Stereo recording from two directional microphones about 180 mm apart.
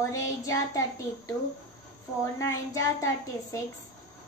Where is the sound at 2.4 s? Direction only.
15° left (ahead or behind).